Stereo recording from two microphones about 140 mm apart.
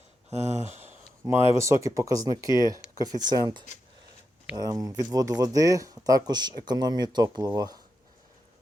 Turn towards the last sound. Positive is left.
turn(degrees=-25)  # may be behind; listen again after turning